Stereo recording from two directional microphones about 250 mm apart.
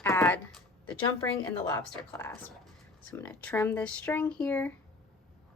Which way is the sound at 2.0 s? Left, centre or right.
Centre.